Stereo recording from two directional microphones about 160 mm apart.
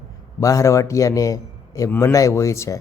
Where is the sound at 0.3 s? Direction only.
20° left (ahead or behind).